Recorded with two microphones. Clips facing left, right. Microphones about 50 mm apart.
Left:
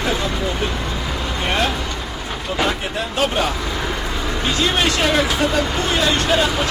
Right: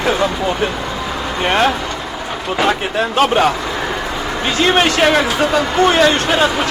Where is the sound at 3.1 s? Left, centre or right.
Right.